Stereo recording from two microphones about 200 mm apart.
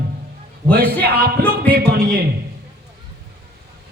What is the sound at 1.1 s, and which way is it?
Speech, 50° right (ahead or behind).